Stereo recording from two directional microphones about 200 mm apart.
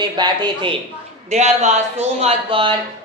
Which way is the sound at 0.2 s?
25° right (ahead or behind).